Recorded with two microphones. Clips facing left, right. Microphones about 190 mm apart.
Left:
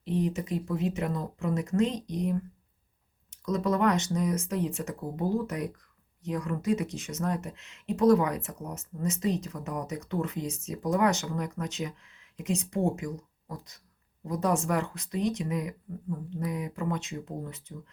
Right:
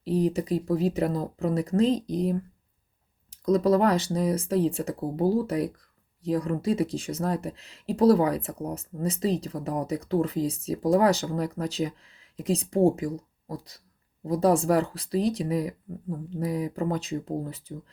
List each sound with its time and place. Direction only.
0.0 s speech: 35° right (ahead or behind)